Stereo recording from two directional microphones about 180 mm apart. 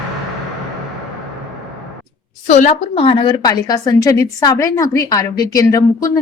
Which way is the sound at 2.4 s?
45° left (ahead or behind).